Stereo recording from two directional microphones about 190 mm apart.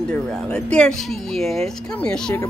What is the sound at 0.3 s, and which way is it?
Speech, 5° left (ahead or behind).